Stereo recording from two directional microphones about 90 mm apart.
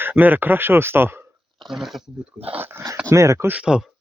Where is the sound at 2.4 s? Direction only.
20° right (ahead or behind).